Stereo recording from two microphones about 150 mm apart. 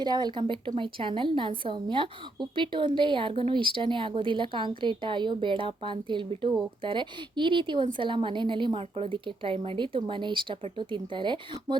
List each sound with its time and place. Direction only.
0.0 s a woman's voice: 30° right (ahead or behind)